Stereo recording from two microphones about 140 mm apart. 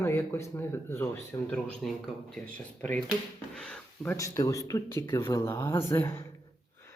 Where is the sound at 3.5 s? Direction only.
5° left (ahead or behind).